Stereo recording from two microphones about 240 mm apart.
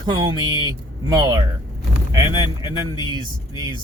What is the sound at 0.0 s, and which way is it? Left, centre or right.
Speech, centre.